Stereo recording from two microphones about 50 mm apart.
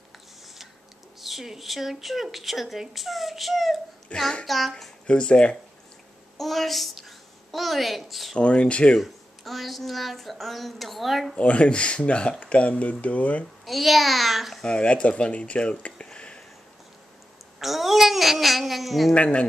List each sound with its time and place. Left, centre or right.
1.2 s speech: centre
4.1 s speech: left
4.5 s speech: centre
5.0 s speech: left
6.3 s a woman's voice: centre
8.4 s speech: left
9.0 s speech: centre
11.3 s speech: left
13.7 s speech: centre
14.6 s speech: left
17.6 s speech: centre
19.1 s speech: left